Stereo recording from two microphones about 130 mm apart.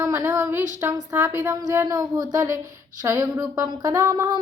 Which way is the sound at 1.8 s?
30° right (ahead or behind).